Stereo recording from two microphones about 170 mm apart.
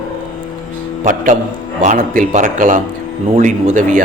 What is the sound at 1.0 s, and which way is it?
Speech, 50° right (ahead or behind).